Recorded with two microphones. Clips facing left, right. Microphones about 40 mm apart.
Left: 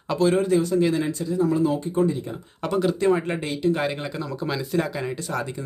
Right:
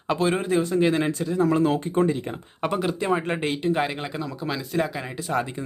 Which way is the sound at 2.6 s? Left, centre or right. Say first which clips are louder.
Left 3 dB; right.